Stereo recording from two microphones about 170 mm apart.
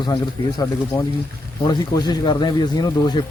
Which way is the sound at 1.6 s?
25° left (ahead or behind).